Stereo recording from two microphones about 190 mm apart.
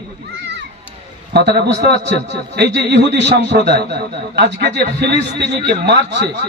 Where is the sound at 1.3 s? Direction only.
60° right (ahead or behind).